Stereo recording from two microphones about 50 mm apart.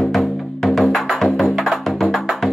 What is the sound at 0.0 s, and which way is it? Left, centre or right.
Music, centre.